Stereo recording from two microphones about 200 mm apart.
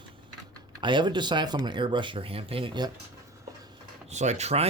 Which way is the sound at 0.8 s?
25° right (ahead or behind).